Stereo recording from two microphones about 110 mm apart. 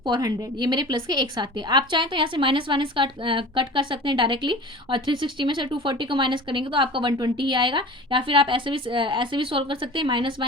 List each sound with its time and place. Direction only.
0.0 s a woman's voice: 35° right (ahead or behind)